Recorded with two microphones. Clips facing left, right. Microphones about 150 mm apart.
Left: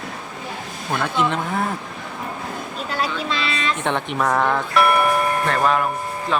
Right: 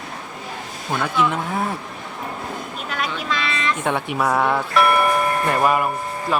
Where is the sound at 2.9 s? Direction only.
30° left (ahead or behind).